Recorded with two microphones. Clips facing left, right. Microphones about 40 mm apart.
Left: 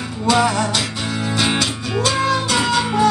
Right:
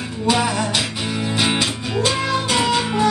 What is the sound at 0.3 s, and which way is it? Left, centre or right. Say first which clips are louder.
Music: left 3 dB; centre.